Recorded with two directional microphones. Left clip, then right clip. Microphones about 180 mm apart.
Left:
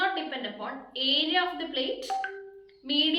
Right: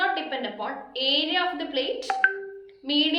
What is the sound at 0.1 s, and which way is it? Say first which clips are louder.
A woman's voice: right 4 dB; 15° right (ahead or behind).